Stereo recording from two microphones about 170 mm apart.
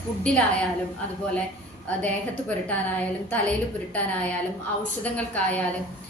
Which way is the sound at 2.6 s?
10° left (ahead or behind).